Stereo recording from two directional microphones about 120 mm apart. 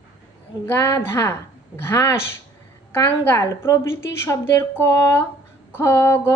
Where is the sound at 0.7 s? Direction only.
25° left (ahead or behind).